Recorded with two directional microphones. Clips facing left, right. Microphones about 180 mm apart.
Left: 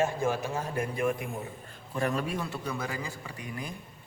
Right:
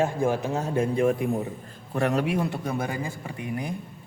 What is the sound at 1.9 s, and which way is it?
Speech, 75° right (ahead or behind).